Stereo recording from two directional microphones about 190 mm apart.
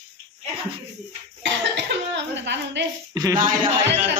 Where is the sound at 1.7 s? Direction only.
70° right (ahead or behind).